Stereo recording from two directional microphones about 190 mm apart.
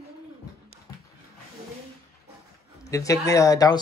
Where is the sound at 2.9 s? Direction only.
15° left (ahead or behind).